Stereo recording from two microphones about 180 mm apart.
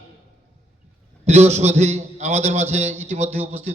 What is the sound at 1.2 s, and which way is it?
Speech, 40° right (ahead or behind).